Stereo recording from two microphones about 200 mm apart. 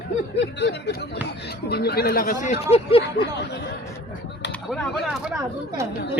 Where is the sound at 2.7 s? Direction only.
30° left (ahead or behind).